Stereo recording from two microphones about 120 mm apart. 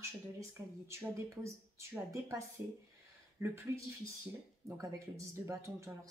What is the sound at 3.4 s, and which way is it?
Speech, 20° right (ahead or behind).